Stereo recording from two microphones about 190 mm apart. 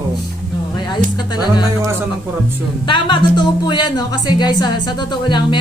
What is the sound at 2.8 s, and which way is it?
Speech, 25° left (ahead or behind).